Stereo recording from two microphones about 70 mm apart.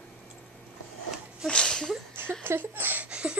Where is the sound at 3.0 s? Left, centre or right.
Centre.